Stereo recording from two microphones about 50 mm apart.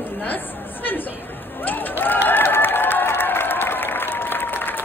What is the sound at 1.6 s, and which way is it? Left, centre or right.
Applause, left.